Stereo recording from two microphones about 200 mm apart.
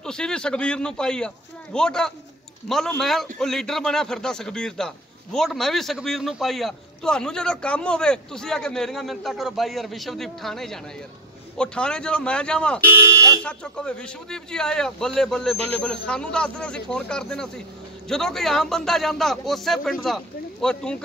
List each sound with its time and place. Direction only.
0.0 s a man's voice: 5° left (ahead or behind)
13.0 s speech: 15° right (ahead or behind)
13.4 s a man's voice: 5° left (ahead or behind)